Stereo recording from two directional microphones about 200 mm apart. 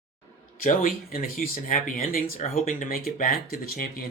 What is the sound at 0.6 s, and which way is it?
Speech, 45° left (ahead or behind).